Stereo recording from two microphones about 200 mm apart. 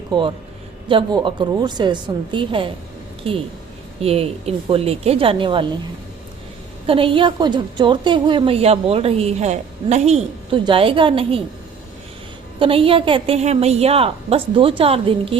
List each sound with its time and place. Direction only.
0.1 s a woman's voice: 25° right (ahead or behind)
4.0 s a woman's voice: 30° right (ahead or behind)
6.8 s a woman's voice: 25° right (ahead or behind)
12.5 s a woman's voice: 25° right (ahead or behind)